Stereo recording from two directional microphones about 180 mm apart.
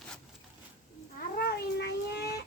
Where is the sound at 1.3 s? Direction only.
65° left (ahead or behind).